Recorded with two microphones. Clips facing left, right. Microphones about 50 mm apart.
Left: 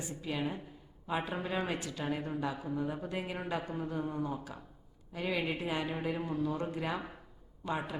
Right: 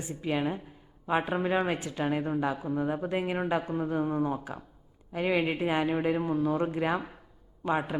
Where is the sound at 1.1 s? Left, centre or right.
Right.